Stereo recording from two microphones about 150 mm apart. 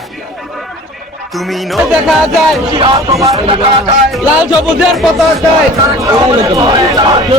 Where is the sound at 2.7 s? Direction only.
35° right (ahead or behind).